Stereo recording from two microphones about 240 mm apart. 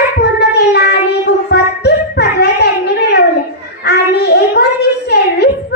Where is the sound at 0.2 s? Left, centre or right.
Left.